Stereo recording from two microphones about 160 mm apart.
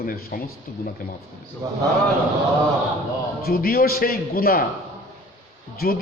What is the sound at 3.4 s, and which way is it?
A man's voice, 70° left (ahead or behind).